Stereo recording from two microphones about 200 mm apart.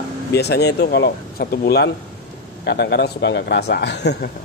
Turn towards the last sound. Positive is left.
turn(degrees=55)  # may be behind; listen again after turning